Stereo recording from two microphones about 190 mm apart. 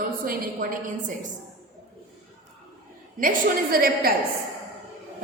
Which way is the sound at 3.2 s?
50° right (ahead or behind).